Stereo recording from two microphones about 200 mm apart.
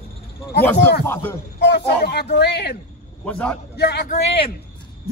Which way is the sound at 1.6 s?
55° left (ahead or behind).